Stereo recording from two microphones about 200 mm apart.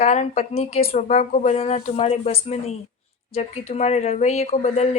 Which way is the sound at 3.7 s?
35° left (ahead or behind).